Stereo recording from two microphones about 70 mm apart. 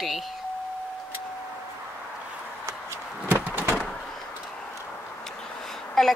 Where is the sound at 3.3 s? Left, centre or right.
Right.